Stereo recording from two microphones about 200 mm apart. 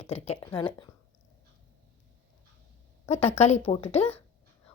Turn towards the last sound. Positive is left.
turn(degrees=30)  # may be behind; listen again after turning